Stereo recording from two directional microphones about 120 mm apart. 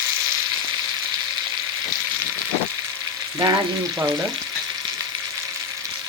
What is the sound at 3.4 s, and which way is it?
Frying, 30° right (ahead or behind).